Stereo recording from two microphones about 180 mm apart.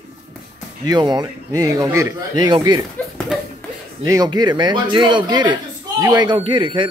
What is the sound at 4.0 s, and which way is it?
Speech, 20° right (ahead or behind).